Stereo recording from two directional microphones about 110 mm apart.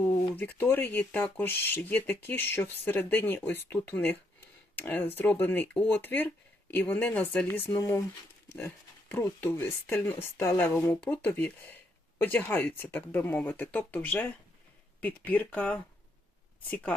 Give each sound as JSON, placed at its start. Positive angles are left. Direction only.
{"t": 0.0, "sound": "speech", "side_deg": 15}